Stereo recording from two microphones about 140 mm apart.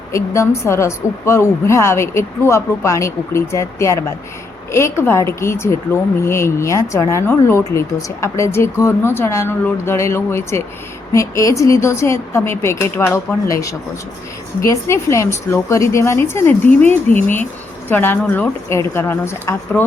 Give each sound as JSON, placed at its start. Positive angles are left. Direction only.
{"t": 0.1, "sound": "a woman's voice", "side_deg": 20}